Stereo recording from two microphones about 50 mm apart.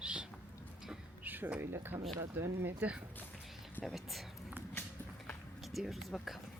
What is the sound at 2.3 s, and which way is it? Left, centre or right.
Speech, right.